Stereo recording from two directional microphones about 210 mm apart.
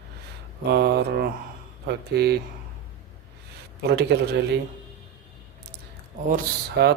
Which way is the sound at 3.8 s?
50° right (ahead or behind).